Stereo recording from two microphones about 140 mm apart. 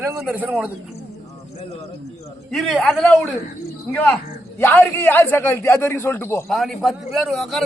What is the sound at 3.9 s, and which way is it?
A man's voice, 15° left (ahead or behind).